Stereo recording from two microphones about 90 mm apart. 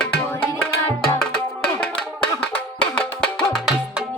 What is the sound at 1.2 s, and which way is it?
Music, 10° left (ahead or behind).